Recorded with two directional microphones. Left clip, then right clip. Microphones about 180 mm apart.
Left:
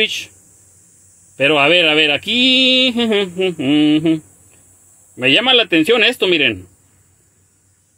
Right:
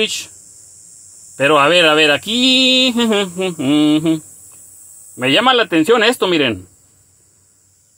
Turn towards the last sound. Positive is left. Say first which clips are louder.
# even
turn(degrees=-10)  # may be behind; listen again after turning